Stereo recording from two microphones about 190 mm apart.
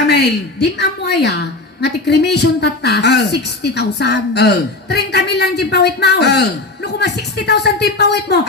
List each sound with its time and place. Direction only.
0.1 s a woman's voice: 60° left (ahead or behind)